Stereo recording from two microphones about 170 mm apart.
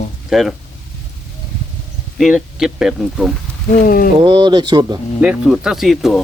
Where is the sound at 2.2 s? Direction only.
5° right (ahead or behind).